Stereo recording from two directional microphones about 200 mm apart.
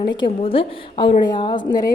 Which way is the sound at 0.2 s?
25° left (ahead or behind).